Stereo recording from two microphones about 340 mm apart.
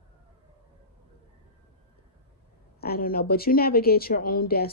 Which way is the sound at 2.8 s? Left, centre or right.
Left.